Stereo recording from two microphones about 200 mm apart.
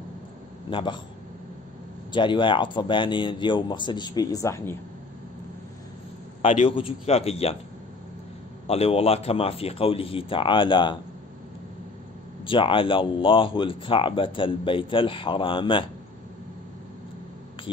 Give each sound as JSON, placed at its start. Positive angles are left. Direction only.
{"t": 0.7, "sound": "speech", "side_deg": 25}
{"t": 2.1, "sound": "speech", "side_deg": 25}
{"t": 6.4, "sound": "speech", "side_deg": 30}
{"t": 8.6, "sound": "speech", "side_deg": 30}
{"t": 12.4, "sound": "speech", "side_deg": 25}